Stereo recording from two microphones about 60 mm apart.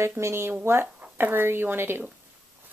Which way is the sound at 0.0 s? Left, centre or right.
Right.